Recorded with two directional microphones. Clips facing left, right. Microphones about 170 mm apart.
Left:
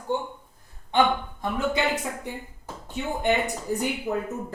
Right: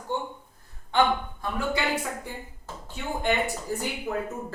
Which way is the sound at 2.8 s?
20° left (ahead or behind).